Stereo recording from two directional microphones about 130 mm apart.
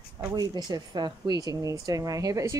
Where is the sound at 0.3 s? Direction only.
30° right (ahead or behind).